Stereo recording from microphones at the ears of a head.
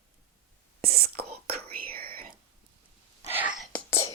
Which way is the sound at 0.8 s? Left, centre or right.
Right.